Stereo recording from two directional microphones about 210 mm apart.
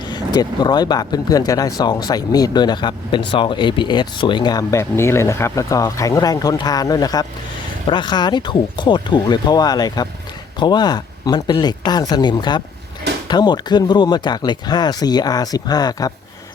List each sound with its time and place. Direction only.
0.1 s speech: 20° left (ahead or behind)